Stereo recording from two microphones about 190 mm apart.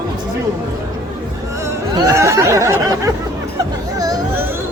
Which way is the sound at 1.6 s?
15° right (ahead or behind).